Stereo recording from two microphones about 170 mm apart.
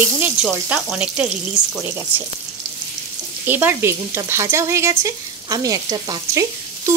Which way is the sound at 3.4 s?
10° right (ahead or behind).